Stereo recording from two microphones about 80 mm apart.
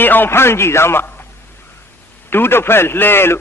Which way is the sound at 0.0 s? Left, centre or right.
Left.